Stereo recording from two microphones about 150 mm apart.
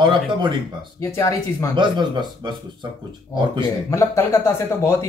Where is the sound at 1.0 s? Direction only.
20° left (ahead or behind).